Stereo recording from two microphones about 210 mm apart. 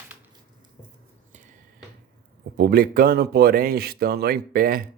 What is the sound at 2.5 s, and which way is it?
Speech, 50° right (ahead or behind).